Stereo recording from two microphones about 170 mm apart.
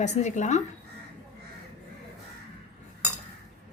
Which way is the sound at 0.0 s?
45° left (ahead or behind).